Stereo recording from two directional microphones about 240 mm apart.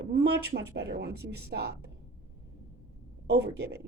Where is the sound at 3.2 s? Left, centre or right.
Right.